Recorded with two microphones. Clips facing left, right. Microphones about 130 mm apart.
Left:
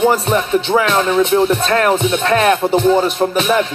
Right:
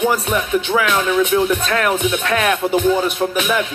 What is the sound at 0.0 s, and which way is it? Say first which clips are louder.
Music: left 4 dB; 30° left (ahead or behind).